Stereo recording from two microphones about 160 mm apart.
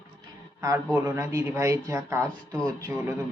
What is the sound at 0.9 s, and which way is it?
Mantra, 15° right (ahead or behind).